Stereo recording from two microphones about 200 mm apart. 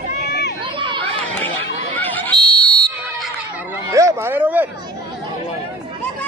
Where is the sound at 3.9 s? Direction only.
15° right (ahead or behind).